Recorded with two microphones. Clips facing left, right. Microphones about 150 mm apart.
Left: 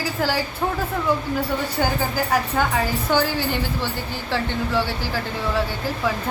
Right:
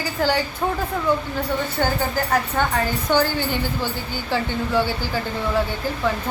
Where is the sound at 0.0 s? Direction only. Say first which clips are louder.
Right 2 dB; centre (ahead or behind).